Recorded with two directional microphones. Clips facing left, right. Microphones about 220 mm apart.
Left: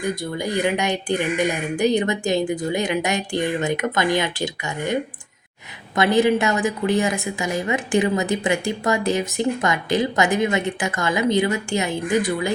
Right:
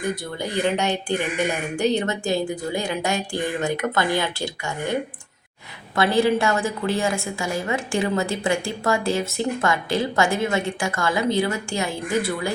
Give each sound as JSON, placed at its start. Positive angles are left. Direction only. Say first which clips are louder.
{"t": 0.5, "sound": "speech", "louder": "even", "side_deg": 15}
{"t": 6.0, "sound": "a woman's voice", "louder": "left 2 dB", "side_deg": 20}